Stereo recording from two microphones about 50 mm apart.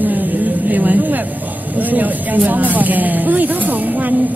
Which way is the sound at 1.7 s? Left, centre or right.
Right.